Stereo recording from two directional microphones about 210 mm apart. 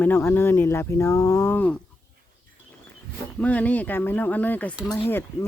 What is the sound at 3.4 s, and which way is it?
Speech, 5° left (ahead or behind).